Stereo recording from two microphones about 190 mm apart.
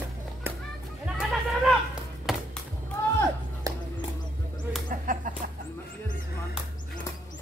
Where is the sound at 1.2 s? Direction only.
Centre (ahead or behind).